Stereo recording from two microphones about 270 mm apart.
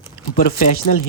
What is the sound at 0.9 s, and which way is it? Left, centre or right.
Speech, left.